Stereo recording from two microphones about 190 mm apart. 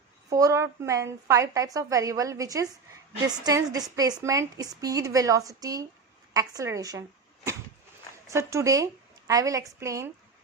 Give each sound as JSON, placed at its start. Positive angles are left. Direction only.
{"t": 0.3, "sound": "a woman's voice", "side_deg": -15}
{"t": 8.3, "sound": "a woman's voice", "side_deg": -15}